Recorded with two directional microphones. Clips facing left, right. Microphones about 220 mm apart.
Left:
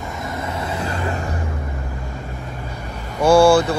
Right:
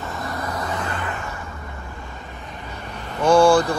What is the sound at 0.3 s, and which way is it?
Vehicle, 25° left (ahead or behind).